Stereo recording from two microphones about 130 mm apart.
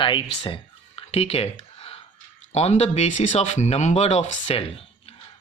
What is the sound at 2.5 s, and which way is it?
Speech, 55° left (ahead or behind).